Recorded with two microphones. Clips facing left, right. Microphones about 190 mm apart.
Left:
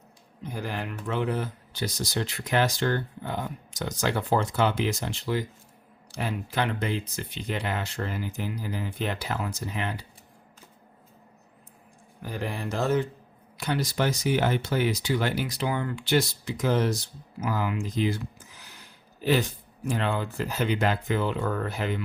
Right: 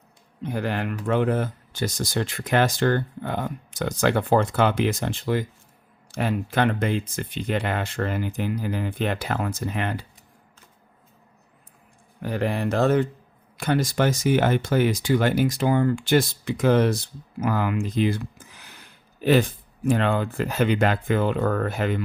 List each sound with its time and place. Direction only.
0.4 s speech: 65° right (ahead or behind)
12.2 s speech: 65° right (ahead or behind)